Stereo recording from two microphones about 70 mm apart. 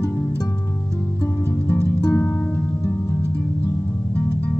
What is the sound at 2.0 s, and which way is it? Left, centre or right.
Music, left.